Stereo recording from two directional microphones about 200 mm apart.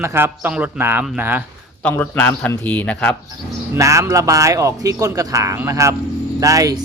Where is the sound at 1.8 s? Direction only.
5° left (ahead or behind).